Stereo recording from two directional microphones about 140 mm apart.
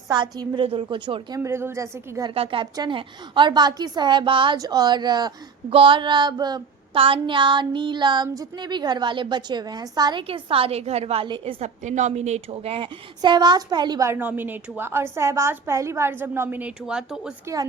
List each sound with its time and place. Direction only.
0.1 s child singing: 30° right (ahead or behind)
1.4 s a woman's voice: 20° right (ahead or behind)
2.3 s child singing: 40° right (ahead or behind)
6.9 s child singing: 40° right (ahead or behind)
10.2 s a woman's voice: 40° right (ahead or behind)
11.6 s child singing: 60° right (ahead or behind); by 14.1 s 30° right (ahead or behind)
14.1 s a woman's voice: 15° right (ahead or behind)
17.4 s a woman's voice: 25° right (ahead or behind)